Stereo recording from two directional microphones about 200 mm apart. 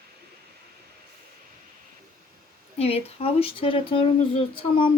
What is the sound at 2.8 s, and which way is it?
Speech, 30° left (ahead or behind).